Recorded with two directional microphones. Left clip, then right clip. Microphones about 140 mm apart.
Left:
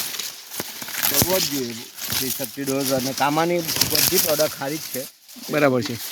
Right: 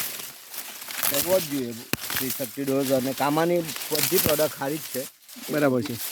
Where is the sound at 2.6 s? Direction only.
5° left (ahead or behind).